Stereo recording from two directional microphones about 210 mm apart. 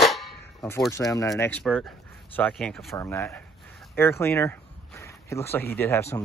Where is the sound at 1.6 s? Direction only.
Centre (ahead or behind).